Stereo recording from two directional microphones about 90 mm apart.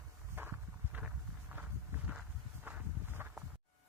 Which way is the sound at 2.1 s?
15° right (ahead or behind).